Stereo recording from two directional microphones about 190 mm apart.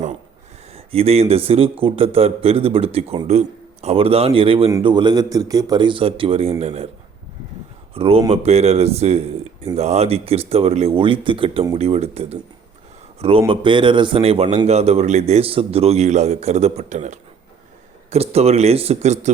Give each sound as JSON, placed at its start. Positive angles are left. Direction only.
{"t": 0.7, "sound": "a man's voice", "side_deg": -30}
{"t": 7.9, "sound": "a man's voice", "side_deg": -30}